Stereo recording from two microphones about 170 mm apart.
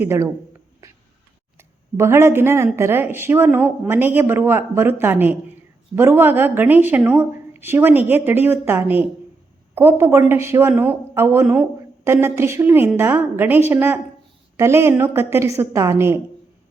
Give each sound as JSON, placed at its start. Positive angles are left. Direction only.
{"t": 0.0, "sound": "speech", "side_deg": -15}
{"t": 1.5, "sound": "speech", "side_deg": -15}